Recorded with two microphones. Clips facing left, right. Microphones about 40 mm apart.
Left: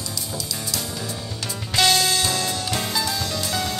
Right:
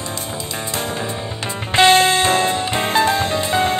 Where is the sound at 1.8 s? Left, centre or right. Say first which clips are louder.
Right 8 dB; right.